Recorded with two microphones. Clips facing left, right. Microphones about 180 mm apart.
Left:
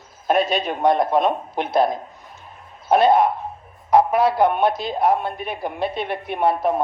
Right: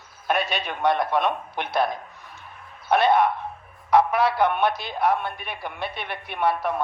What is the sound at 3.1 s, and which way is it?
Speech, 45° left (ahead or behind).